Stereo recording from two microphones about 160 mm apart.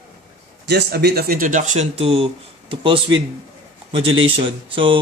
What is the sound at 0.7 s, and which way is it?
Speech, 90° right.